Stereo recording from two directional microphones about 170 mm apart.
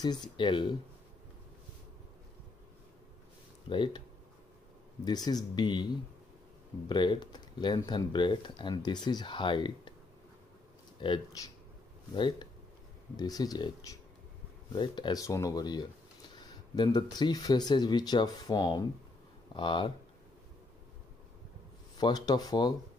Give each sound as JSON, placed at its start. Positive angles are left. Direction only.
{"t": 0.0, "sound": "speech", "side_deg": 25}
{"t": 3.6, "sound": "speech", "side_deg": 30}
{"t": 5.0, "sound": "speech", "side_deg": 25}
{"t": 6.9, "sound": "speech", "side_deg": 25}
{"t": 11.0, "sound": "speech", "side_deg": 25}
{"t": 21.9, "sound": "speech", "side_deg": 25}